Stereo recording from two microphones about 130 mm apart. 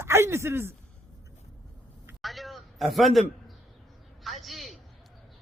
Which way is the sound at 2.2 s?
Centre (ahead or behind).